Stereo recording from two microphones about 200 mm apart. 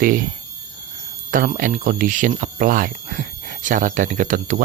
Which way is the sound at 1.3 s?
40° right (ahead or behind).